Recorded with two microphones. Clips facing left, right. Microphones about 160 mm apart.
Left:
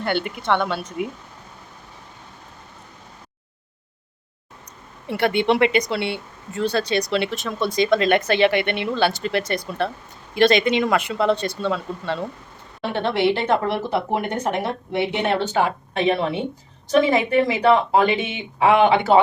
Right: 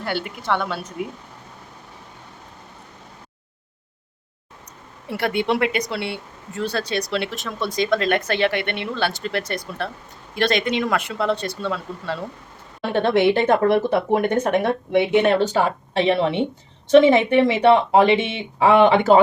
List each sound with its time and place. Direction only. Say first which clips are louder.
0.0 s speech: left 3 dB; 5° right (ahead or behind)
5.0 s speech: left 3 dB; centre (ahead or behind)
12.9 s speech: right 3 dB; 50° right (ahead or behind)
15.5 s a woman's voice: right 1 dB; 35° right (ahead or behind)